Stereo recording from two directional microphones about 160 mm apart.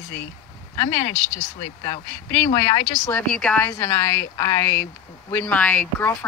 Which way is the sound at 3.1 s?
5° left (ahead or behind).